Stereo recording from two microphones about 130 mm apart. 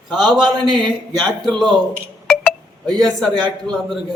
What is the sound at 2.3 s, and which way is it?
Telephone dialing, 5° left (ahead or behind).